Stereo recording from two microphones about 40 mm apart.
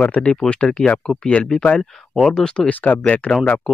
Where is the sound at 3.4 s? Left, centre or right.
Left.